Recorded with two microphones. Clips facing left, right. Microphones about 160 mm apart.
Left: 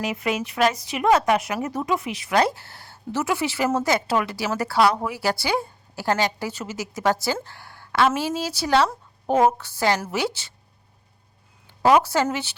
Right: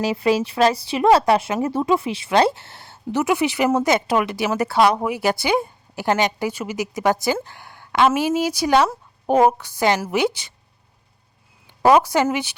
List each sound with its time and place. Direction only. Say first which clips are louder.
0.0 s speech: right 6 dB; 30° right (ahead or behind)
11.8 s speech: right 3 dB; 15° right (ahead or behind)